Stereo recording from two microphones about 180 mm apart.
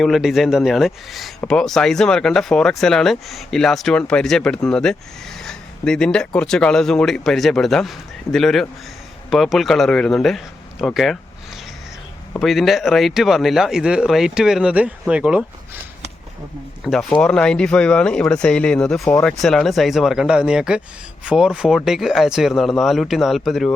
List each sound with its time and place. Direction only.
0.0 s speech: centre (ahead or behind)
12.4 s speech: centre (ahead or behind)
16.8 s speech: centre (ahead or behind)